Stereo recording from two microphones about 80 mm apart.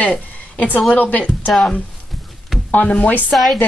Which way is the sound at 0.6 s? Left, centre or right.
Centre.